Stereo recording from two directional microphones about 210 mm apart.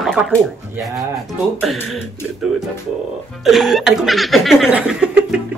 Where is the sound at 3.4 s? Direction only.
Centre (ahead or behind).